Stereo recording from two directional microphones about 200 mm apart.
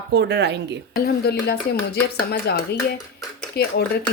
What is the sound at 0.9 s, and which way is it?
Speech, 50° left (ahead or behind).